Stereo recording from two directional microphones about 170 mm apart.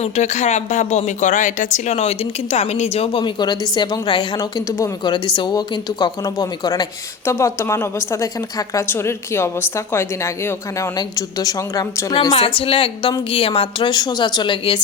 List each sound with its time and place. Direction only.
0.0 s a woman's voice: 40° left (ahead or behind); by 12.3 s 20° left (ahead or behind)
12.5 s a woman's voice: 30° left (ahead or behind)